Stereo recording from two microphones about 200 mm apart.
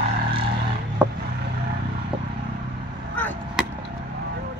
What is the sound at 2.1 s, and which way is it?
Vehicle, 25° right (ahead or behind).